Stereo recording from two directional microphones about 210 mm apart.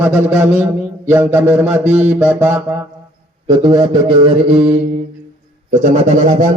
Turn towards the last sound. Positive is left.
turn(degrees=-40)  # may be behind; listen again after turning